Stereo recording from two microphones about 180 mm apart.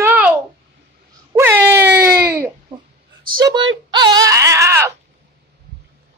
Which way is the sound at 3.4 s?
25° right (ahead or behind).